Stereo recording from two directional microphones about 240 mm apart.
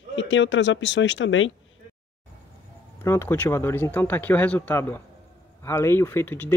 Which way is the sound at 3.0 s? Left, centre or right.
Centre.